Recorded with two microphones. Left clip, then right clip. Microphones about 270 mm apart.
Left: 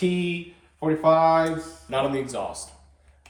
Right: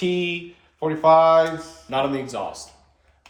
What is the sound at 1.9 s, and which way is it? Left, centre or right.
Speech, right.